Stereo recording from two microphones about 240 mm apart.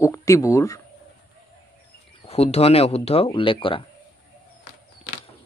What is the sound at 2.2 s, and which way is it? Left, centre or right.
Speech, left.